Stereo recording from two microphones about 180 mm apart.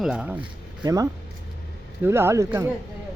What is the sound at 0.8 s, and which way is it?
Speech, 20° right (ahead or behind).